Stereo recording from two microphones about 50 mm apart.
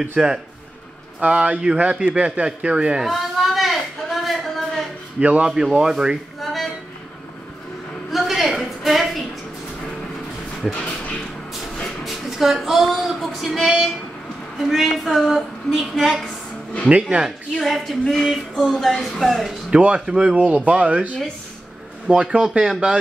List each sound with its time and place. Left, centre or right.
0.0 s speech: centre
1.2 s speech: right
3.1 s a sound: centre
5.2 s speech: right
5.5 s speech: centre
6.4 s a sound: centre
8.1 s a sound: centre
10.7 s a sound: left
12.0 s female singing: centre
14.6 s a woman's voice: centre
16.9 s speech: centre
17.6 s a woman's voice: centre
19.7 s speech: right